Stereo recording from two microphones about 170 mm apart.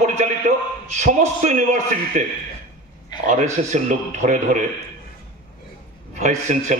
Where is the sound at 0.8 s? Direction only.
45° right (ahead or behind).